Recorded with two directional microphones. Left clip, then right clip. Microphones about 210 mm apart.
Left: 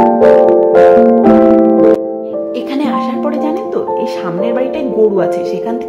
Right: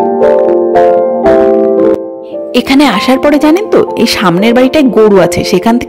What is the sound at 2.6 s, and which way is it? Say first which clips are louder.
Speech: right 12 dB; 45° right (ahead or behind).